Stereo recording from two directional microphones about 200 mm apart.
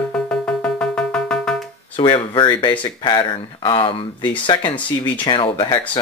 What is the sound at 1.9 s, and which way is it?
Speech, 25° left (ahead or behind).